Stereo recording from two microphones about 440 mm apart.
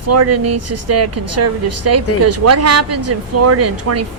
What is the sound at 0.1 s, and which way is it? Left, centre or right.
Speech, right.